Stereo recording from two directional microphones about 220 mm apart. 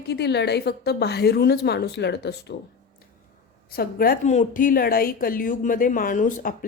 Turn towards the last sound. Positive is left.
turn(degrees=40)  # may be behind; listen again after turning